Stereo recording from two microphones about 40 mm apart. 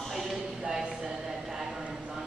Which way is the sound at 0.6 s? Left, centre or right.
Centre.